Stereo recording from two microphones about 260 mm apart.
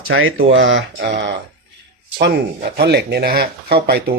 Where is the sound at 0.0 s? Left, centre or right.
Right.